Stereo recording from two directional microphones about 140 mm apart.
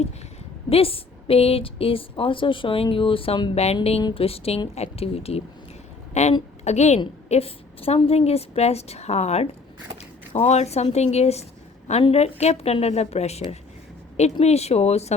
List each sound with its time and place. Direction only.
0.7 s a woman's voice: 40° left (ahead or behind)
10.0 s a sound: 50° left (ahead or behind)
10.9 s a woman's voice: 50° left (ahead or behind)